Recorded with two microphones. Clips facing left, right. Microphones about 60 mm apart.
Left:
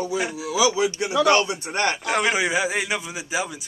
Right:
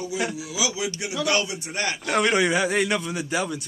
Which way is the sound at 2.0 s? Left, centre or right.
Centre.